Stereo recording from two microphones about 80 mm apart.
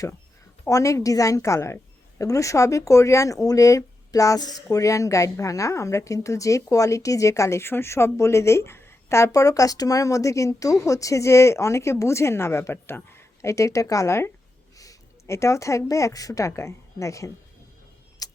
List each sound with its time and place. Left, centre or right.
0.7 s a woman's voice: left
18.2 s keys jangling: left